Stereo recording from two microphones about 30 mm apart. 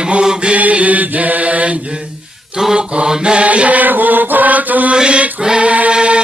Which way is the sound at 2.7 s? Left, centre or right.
Right.